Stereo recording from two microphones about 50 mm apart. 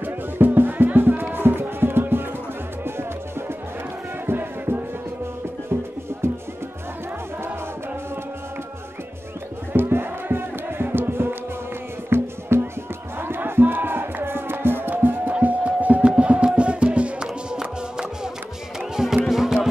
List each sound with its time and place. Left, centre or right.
0.0 s music: right
6.2 s music: right
9.7 s music: right
15.3 s music: right; by 19.7 s centre